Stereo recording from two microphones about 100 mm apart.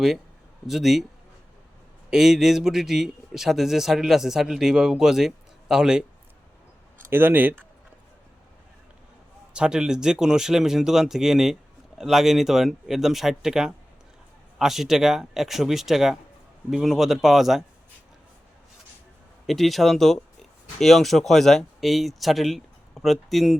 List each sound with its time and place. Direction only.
0.7 s a man's voice: 5° right (ahead or behind)
2.0 s a man's voice: 5° right (ahead or behind)
7.1 s speech: 20° right (ahead or behind)
9.5 s a man's voice: 10° right (ahead or behind)
19.5 s a man's voice: centre (ahead or behind)